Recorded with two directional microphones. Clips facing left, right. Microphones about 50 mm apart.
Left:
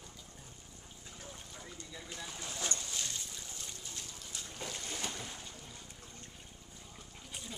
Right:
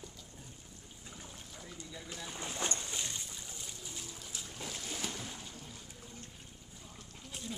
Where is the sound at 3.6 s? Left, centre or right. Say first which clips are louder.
Right 1 dB; centre.